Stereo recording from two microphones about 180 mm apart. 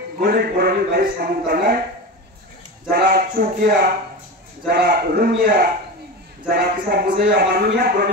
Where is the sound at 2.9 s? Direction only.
55° right (ahead or behind).